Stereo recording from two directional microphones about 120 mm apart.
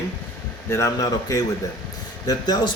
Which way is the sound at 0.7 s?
25° left (ahead or behind).